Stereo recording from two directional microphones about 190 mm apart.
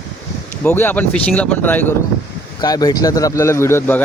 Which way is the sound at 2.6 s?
20° left (ahead or behind).